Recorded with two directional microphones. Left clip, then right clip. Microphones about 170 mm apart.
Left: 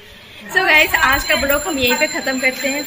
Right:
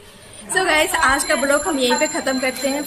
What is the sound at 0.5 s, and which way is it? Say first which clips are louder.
Speech: left 4 dB; 10° right (ahead or behind).